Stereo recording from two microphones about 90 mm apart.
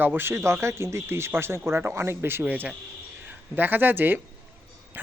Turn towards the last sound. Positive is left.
turn(degrees=-20)  # may be behind; listen again after turning